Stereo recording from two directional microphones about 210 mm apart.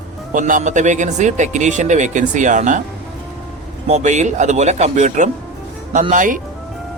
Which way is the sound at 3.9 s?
35° right (ahead or behind).